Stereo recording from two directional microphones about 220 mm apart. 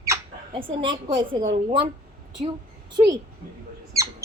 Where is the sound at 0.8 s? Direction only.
20° right (ahead or behind).